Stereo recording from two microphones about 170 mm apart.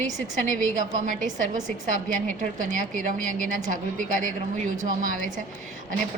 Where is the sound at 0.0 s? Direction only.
50° right (ahead or behind).